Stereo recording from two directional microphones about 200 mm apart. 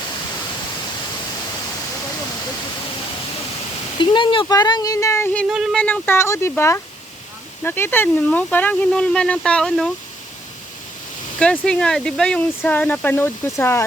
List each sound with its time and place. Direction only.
4.0 s speech: 25° left (ahead or behind); by 5.5 s 10° left (ahead or behind)
5.5 s speech: centre (ahead or behind)
11.3 s speech: 5° left (ahead or behind)